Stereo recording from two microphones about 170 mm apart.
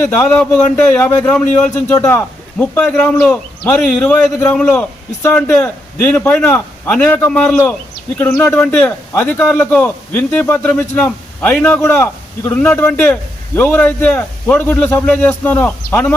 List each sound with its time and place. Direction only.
0.0 s speech: 10° left (ahead or behind)